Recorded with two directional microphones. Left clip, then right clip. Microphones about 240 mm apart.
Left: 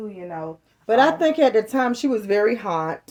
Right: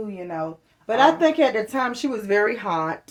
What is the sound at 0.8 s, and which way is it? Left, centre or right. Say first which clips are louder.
Speech: even; left.